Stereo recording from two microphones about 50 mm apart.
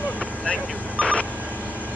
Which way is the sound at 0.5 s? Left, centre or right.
Left.